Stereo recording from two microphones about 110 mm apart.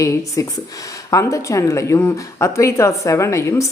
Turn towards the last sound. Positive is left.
turn(degrees=25)  # may be behind; listen again after turning